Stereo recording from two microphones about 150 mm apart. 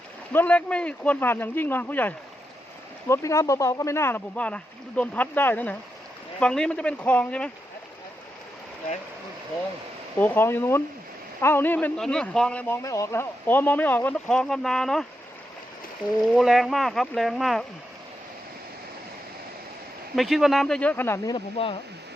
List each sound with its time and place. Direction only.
0.3 s a man's voice: 10° left (ahead or behind)
10.2 s a man's voice: 15° left (ahead or behind)
16.3 s speech: centre (ahead or behind)
20.1 s speech: centre (ahead or behind); by 21.3 s 15° left (ahead or behind)
21.3 s speech: 35° left (ahead or behind)